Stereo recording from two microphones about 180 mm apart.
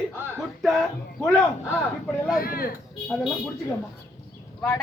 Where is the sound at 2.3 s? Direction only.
55° left (ahead or behind).